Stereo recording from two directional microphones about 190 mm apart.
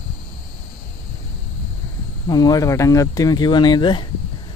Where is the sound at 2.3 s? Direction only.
20° left (ahead or behind).